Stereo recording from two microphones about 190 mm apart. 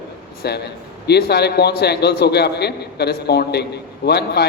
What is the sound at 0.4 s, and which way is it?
A man's voice, 60° left (ahead or behind).